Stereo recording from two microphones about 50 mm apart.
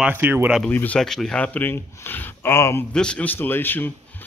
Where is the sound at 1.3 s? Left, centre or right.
Left.